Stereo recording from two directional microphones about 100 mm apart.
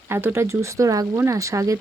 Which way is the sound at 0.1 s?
25° right (ahead or behind).